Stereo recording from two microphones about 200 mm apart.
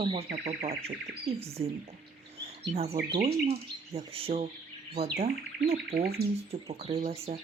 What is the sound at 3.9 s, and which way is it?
Speech, 30° right (ahead or behind).